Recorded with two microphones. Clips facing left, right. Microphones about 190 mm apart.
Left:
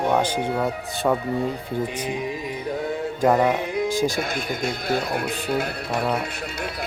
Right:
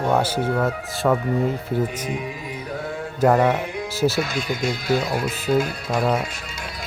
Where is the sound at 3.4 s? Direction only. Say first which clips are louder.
Even; 15° left (ahead or behind).